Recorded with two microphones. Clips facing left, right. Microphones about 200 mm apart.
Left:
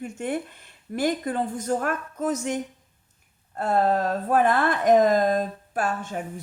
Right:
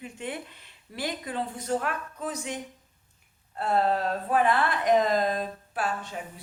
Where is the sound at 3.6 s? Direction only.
45° left (ahead or behind).